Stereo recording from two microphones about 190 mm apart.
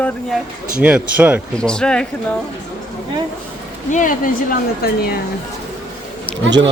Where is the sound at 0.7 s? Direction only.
5° right (ahead or behind).